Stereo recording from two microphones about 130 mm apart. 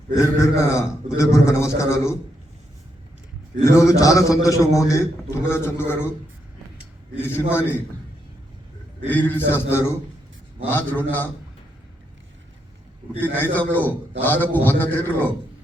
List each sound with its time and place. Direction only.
0.2 s a man's voice: 20° left (ahead or behind)
3.7 s a man's voice: 25° left (ahead or behind)
7.2 s a man's voice: 15° left (ahead or behind)
9.0 s a man's voice: 15° left (ahead or behind)
13.1 s a man's voice: 15° left (ahead or behind)